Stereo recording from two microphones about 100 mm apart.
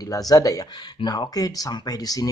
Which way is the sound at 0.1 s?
35° left (ahead or behind).